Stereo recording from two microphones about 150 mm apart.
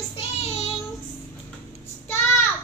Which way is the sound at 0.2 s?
45° left (ahead or behind).